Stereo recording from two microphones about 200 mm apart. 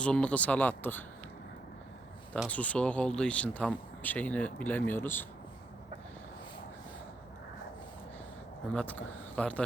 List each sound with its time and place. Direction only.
0.0 s speech: 5° left (ahead or behind)
2.3 s speech: 5° left (ahead or behind)
8.7 s a man's voice: 5° left (ahead or behind)